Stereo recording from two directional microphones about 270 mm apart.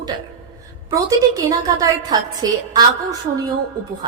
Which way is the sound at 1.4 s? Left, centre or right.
Centre.